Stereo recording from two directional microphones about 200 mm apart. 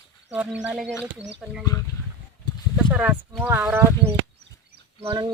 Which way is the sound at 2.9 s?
5° right (ahead or behind).